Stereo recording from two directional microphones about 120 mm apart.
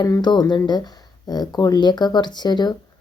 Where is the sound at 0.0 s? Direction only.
35° left (ahead or behind).